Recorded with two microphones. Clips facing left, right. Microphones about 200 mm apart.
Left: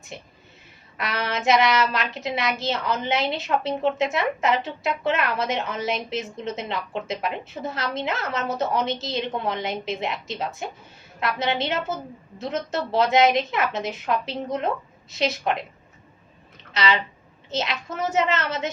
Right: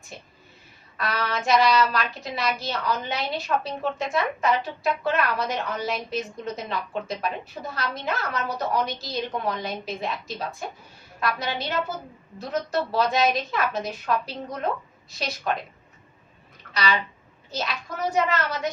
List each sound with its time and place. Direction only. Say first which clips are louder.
0.9 s a woman's voice: even; 20° left (ahead or behind)
16.7 s a woman's voice: left 2 dB; 25° left (ahead or behind)